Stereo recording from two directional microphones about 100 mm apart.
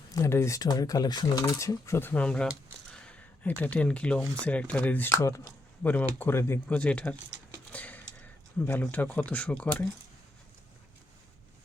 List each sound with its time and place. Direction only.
0.2 s speech: 30° left (ahead or behind)
2.0 s speech: 15° left (ahead or behind)
2.9 s a sound: 10° left (ahead or behind)
4.4 s speech: 15° left (ahead or behind)
5.1 s speech: 30° left (ahead or behind)
5.8 s speech: 15° left (ahead or behind)
6.7 s speech: 10° left (ahead or behind)
7.7 s a sound: 15° left (ahead or behind)